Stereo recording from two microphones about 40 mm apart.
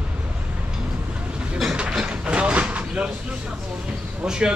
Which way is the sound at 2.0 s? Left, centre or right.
Right.